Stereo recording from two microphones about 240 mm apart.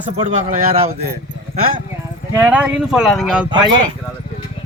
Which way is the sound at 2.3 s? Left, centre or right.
Centre.